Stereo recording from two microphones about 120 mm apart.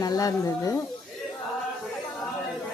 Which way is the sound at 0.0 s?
30° left (ahead or behind).